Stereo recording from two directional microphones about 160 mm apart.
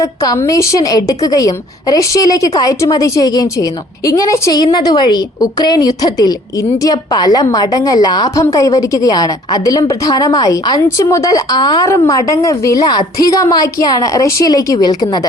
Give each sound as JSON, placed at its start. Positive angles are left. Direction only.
{"t": 0.0, "sound": "a woman's voice", "side_deg": 20}